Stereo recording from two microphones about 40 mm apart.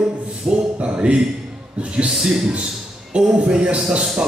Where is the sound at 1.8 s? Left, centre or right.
Right.